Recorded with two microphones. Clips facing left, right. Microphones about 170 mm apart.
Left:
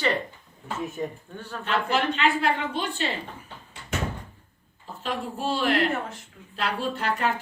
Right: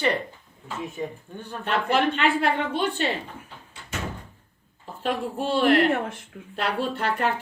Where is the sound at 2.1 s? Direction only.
55° right (ahead or behind).